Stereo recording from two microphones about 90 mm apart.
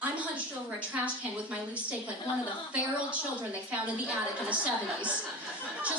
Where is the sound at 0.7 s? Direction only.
15° right (ahead or behind).